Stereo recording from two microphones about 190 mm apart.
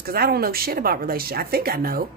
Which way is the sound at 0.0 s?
55° right (ahead or behind).